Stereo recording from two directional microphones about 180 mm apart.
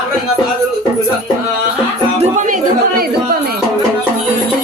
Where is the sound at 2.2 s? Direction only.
45° right (ahead or behind).